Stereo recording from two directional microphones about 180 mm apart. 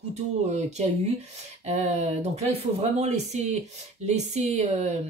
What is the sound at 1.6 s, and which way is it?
Speech, 35° right (ahead or behind).